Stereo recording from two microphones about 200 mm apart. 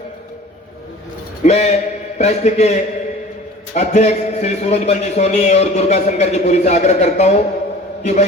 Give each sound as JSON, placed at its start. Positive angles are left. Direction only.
{"t": 1.5, "sound": "a man's voice", "side_deg": 35}